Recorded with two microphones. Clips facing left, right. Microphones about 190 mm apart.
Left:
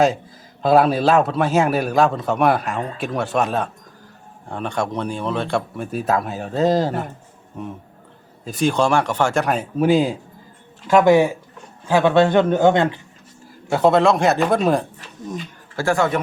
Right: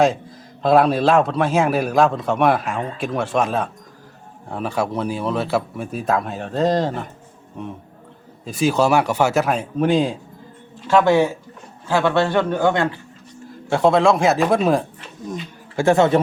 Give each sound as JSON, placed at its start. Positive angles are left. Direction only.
{"t": 0.0, "sound": "a man's voice", "side_deg": 0}
{"t": 13.7, "sound": "a man's voice", "side_deg": 0}
{"t": 15.7, "sound": "speech", "side_deg": -20}